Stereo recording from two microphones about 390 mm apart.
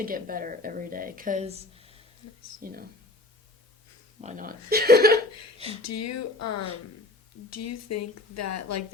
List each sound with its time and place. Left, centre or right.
0.0 s speech: right
4.2 s speech: centre
5.8 s speech: left